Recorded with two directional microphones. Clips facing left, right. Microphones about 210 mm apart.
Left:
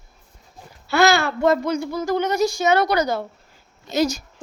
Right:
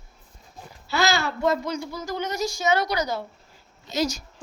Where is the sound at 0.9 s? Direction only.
60° left (ahead or behind).